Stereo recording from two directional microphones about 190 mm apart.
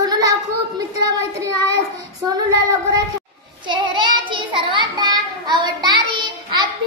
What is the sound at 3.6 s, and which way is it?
Child singing, 25° right (ahead or behind).